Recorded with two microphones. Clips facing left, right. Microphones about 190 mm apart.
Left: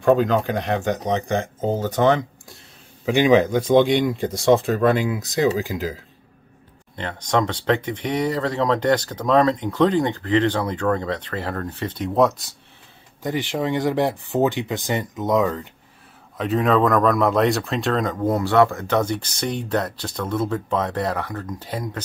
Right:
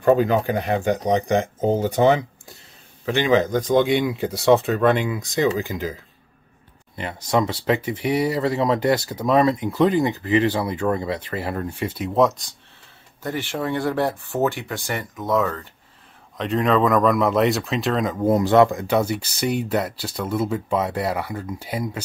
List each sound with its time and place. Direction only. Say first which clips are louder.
0.0 s speech: even; 5° right (ahead or behind)
3.1 s speech: left 3 dB; 10° left (ahead or behind)
3.8 s speech: left 1 dB; 5° right (ahead or behind)
7.0 s speech: even; 10° right (ahead or behind)
13.2 s speech: left 2 dB; 15° left (ahead or behind)
16.3 s speech: left 1 dB; centre (ahead or behind)
18.3 s speech: right 3 dB; 20° right (ahead or behind)